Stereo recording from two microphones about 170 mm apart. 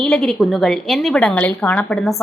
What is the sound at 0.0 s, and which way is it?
A woman's voice, centre (ahead or behind).